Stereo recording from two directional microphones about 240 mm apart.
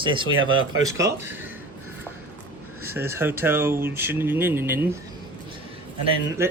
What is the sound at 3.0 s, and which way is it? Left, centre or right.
Speech, centre.